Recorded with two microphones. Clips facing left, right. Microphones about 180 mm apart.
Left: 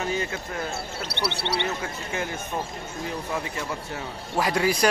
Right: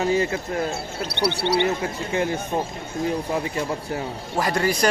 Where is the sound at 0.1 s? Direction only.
30° right (ahead or behind).